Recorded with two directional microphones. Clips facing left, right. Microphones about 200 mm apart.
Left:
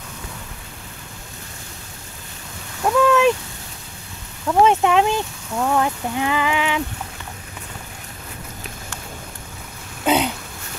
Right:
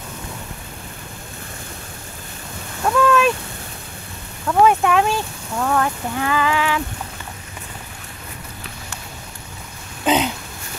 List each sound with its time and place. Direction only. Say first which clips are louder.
2.8 s a sound: left 1 dB; 15° left (ahead or behind)
4.5 s speech: even; 20° left (ahead or behind)
10.0 s throat clearing: even; 10° left (ahead or behind)